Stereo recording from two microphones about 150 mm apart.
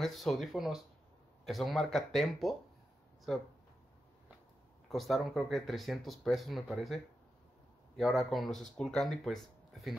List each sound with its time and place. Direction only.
0.0 s speech: centre (ahead or behind)
4.8 s speech: centre (ahead or behind)
8.0 s speech: centre (ahead or behind)